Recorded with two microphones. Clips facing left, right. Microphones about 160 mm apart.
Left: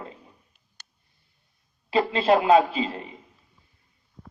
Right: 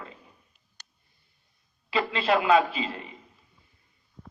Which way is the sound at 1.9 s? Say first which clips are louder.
Left 4 dB; 40° left (ahead or behind).